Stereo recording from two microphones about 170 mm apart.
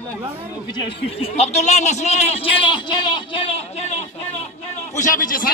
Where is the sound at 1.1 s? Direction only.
35° left (ahead or behind); by 5.5 s 55° left (ahead or behind).